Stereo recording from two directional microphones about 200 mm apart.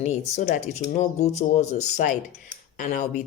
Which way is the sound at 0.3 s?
35° left (ahead or behind).